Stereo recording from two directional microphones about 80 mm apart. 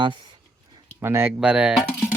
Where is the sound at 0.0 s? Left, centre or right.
Right.